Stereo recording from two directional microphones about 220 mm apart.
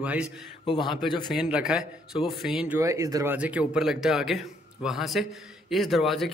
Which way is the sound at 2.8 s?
15° right (ahead or behind).